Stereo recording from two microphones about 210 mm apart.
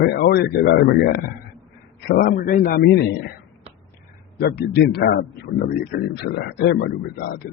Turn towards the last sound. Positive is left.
turn(degrees=50)  # may be behind; listen again after turning